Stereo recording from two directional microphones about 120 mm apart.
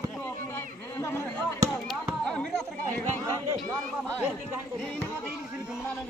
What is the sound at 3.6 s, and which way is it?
Chatter, 10° left (ahead or behind).